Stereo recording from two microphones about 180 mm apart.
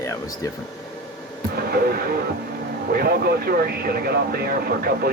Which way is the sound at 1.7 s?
60° right (ahead or behind).